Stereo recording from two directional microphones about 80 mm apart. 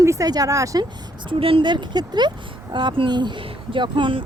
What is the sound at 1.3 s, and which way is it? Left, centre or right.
Speech, right.